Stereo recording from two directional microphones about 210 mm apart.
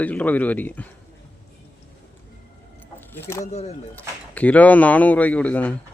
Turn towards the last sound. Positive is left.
turn(degrees=5)  # may be behind; listen again after turning